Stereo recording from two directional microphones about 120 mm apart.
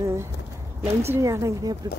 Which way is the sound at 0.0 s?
25° right (ahead or behind).